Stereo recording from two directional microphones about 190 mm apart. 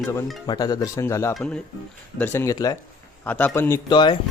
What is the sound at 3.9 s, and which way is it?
Speech, 25° left (ahead or behind).